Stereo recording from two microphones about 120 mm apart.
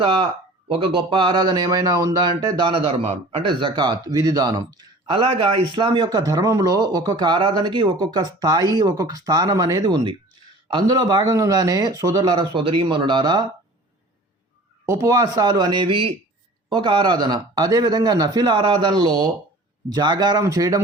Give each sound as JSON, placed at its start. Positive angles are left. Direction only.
{"t": 0.0, "sound": "speech", "side_deg": -45}
{"t": 14.8, "sound": "speech", "side_deg": -25}